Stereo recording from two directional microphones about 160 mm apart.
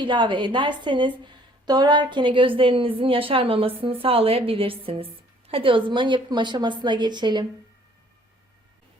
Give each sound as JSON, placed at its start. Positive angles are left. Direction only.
{"t": 0.0, "sound": "a woman's voice", "side_deg": -30}